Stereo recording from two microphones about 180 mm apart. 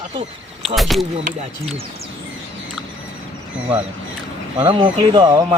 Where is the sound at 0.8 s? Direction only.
Centre (ahead or behind).